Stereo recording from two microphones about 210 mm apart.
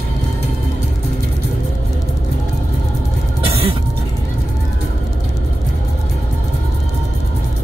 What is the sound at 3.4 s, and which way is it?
Vehicle, 25° right (ahead or behind).